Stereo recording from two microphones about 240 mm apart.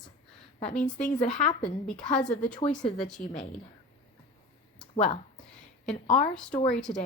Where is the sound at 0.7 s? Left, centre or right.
Left.